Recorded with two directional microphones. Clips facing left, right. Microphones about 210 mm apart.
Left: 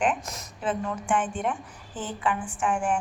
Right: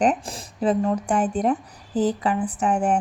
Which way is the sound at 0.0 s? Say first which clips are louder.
Right 5 dB; 35° right (ahead or behind).